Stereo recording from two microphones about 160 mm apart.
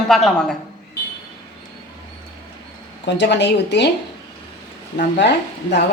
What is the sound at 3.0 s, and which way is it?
Speech, 90° left.